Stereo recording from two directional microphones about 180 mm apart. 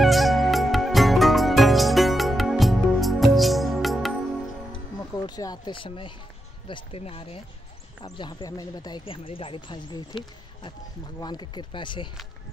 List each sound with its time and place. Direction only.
0.0 s music: centre (ahead or behind)
4.9 s music: 20° left (ahead or behind)
6.7 s speech: 35° left (ahead or behind)
11.1 s speech: 25° left (ahead or behind)